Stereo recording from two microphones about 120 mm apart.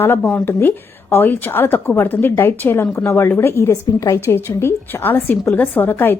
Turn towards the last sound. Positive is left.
turn(degrees=15)  # may be behind; listen again after turning